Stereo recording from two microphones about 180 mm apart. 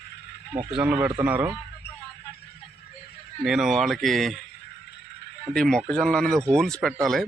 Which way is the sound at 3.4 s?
5° right (ahead or behind).